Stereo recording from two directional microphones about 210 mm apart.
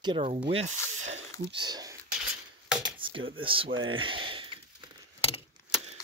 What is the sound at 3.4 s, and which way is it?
Speech, 25° right (ahead or behind).